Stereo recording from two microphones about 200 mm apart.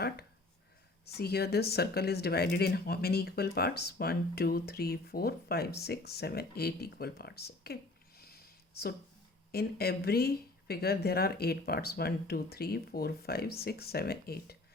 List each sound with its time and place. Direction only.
1.0 s speech: 55° left (ahead or behind)
8.2 s a sound: 50° left (ahead or behind)
9.5 s speech: 50° left (ahead or behind)